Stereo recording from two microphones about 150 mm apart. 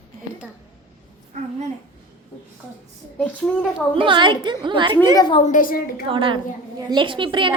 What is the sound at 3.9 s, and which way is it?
A woman's voice, 35° right (ahead or behind).